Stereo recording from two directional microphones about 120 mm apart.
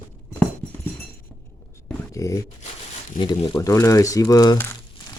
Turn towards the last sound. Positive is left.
turn(degrees=35)  # may be behind; listen again after turning